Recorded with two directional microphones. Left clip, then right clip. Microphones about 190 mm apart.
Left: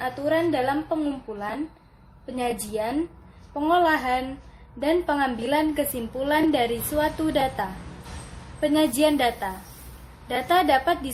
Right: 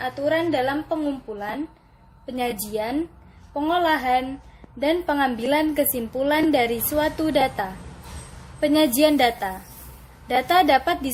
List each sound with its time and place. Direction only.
0.0 s a woman's voice: 10° right (ahead or behind)
2.2 s a woman's voice: 20° right (ahead or behind)